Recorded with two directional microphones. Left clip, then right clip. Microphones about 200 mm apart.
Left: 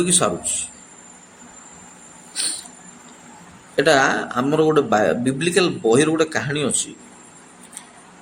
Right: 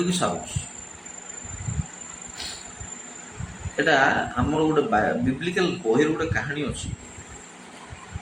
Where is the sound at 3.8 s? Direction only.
60° left (ahead or behind).